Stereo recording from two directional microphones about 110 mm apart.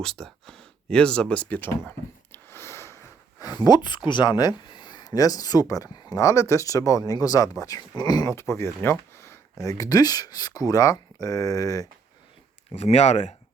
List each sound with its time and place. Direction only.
0.0 s speech: 5° left (ahead or behind)
1.9 s a sound: 20° left (ahead or behind)
3.4 s speech: 35° left (ahead or behind)
8.3 s speech: 25° left (ahead or behind)
12.7 s speech: 80° left